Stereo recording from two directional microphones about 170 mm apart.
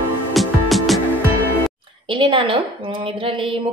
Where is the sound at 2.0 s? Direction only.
30° right (ahead or behind).